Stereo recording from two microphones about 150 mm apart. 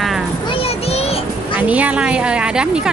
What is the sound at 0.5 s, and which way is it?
Child singing, 40° left (ahead or behind).